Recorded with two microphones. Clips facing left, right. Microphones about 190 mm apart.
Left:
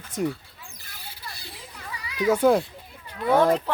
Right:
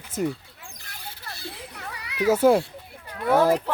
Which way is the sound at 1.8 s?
65° right (ahead or behind).